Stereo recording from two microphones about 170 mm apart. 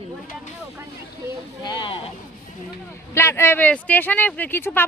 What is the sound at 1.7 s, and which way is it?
Speech, 30° left (ahead or behind).